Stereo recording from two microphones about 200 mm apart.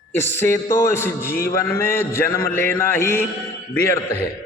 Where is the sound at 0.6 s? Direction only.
45° left (ahead or behind).